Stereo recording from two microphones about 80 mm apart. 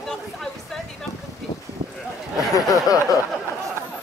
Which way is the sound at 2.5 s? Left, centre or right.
Left.